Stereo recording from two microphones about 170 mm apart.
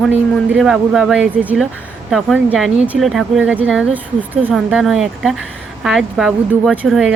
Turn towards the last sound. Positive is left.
turn(degrees=-5)  # may be behind; listen again after turning